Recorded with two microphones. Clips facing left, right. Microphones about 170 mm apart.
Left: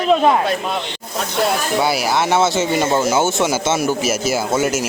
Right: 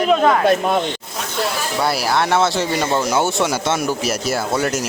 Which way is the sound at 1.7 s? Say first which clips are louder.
Right 1 dB; centre (ahead or behind).